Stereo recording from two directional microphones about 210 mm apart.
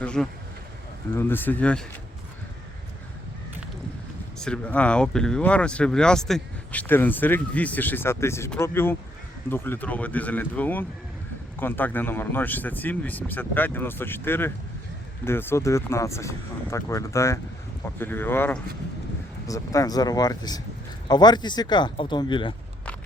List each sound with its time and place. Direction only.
0.0 s speech: 5° left (ahead or behind)
4.4 s speech: 5° left (ahead or behind); by 22.5 s 20° left (ahead or behind)